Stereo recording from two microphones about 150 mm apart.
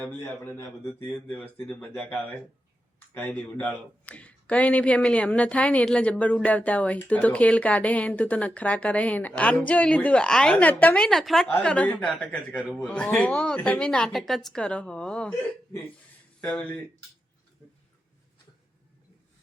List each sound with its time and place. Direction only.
0.0 s speech: 10° left (ahead or behind)
16.4 s speech: 10° left (ahead or behind)